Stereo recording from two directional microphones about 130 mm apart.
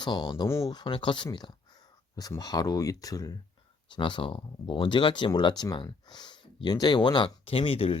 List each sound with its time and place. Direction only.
0.0 s speech: 35° left (ahead or behind)
0.4 s speech: 20° left (ahead or behind)
0.7 s speech: 35° left (ahead or behind)
3.8 s speech: 40° left (ahead or behind)